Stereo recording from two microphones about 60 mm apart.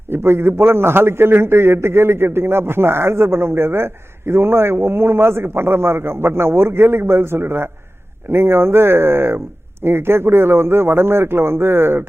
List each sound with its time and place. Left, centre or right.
0.1 s a man's voice: right